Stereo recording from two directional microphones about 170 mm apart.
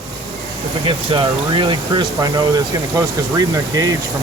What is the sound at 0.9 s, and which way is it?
Speech, 30° right (ahead or behind).